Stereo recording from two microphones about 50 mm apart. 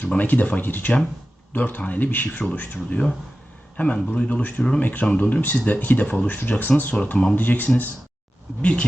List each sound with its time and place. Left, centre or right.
0.2 s speech: left
8.6 s speech: left